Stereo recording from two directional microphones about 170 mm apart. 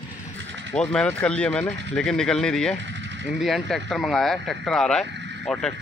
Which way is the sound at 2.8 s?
90° right.